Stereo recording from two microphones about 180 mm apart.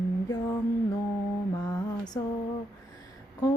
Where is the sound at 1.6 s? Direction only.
20° left (ahead or behind).